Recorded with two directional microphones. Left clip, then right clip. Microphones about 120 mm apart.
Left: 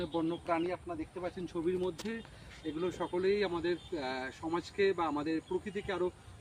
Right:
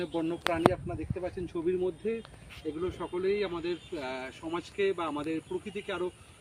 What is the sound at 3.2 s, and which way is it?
Speech, 25° left (ahead or behind).